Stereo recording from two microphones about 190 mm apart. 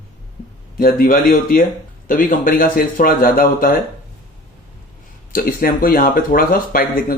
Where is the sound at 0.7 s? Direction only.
50° left (ahead or behind).